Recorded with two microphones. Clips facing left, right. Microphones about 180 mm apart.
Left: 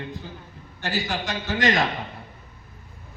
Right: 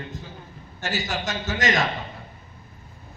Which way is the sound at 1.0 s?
45° right (ahead or behind).